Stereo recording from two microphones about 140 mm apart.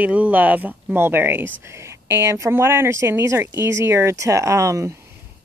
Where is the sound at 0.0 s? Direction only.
10° right (ahead or behind).